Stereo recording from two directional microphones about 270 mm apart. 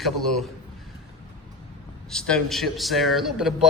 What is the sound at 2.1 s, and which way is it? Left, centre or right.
A man's voice, centre.